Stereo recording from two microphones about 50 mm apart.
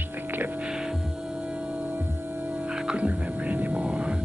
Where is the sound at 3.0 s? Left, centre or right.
Right.